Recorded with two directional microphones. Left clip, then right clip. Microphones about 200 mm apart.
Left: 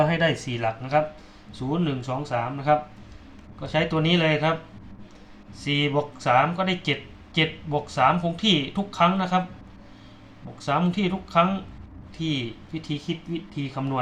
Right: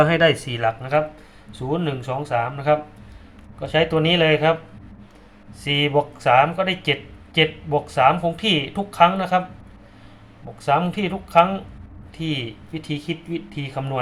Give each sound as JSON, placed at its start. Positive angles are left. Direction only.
{"t": 0.0, "sound": "speech", "side_deg": -30}
{"t": 5.5, "sound": "speech", "side_deg": -20}
{"t": 10.7, "sound": "speech", "side_deg": -20}